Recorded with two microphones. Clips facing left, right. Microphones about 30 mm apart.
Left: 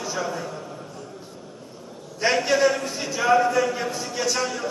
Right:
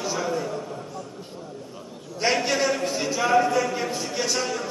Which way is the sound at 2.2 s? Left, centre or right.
Centre.